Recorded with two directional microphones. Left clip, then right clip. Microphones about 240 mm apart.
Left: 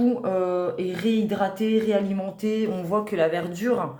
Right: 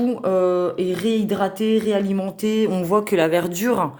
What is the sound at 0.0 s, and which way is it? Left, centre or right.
Speech, right.